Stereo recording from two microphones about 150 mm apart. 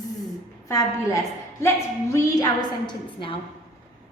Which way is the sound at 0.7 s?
20° left (ahead or behind).